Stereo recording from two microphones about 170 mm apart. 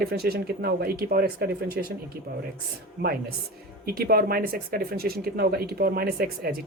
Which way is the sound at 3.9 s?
60° right (ahead or behind).